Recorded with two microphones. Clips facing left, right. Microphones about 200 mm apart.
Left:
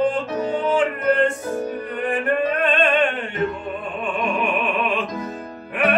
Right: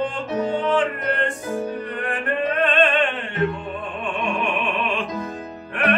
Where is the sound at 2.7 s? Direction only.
10° left (ahead or behind).